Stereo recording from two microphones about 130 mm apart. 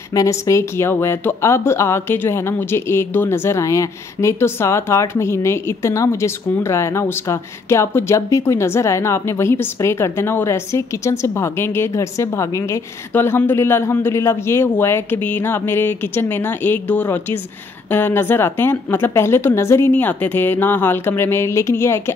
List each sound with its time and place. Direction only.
0.1 s a woman's voice: 25° left (ahead or behind)